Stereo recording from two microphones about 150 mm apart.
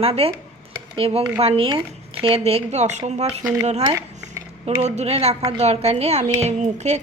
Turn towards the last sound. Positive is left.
turn(degrees=-50)  # may be behind; listen again after turning